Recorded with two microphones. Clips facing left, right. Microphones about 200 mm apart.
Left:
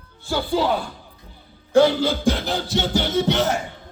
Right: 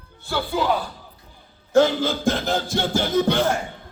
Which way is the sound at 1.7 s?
50° right (ahead or behind).